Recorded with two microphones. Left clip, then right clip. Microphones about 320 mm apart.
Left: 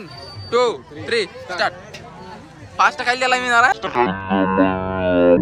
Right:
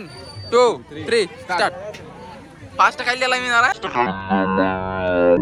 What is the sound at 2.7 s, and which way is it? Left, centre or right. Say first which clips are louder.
Speech: even; centre.